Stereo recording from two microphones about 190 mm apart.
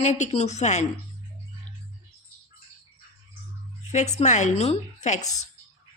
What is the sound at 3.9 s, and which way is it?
Speech, 35° left (ahead or behind).